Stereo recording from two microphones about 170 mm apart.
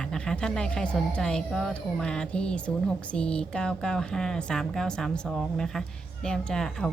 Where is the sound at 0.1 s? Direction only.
5° left (ahead or behind).